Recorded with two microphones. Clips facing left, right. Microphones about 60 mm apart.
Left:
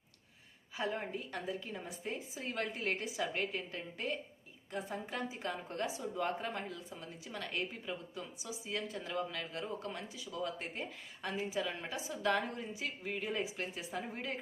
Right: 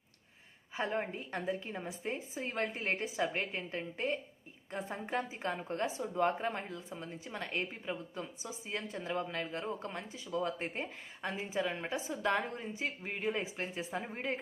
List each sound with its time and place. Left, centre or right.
0.7 s speech: right